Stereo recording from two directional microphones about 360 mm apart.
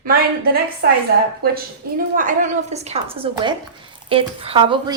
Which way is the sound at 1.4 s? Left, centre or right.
Right.